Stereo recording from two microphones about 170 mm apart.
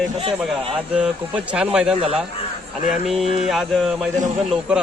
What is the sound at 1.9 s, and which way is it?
Speech, 35° right (ahead or behind).